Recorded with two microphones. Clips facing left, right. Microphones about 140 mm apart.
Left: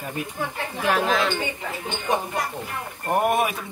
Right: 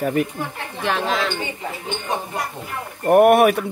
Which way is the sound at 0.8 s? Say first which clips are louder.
Even; 5° left (ahead or behind).